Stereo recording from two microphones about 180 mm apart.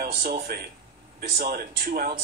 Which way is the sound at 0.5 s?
55° right (ahead or behind).